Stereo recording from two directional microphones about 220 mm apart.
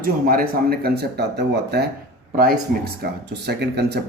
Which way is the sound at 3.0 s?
50° right (ahead or behind).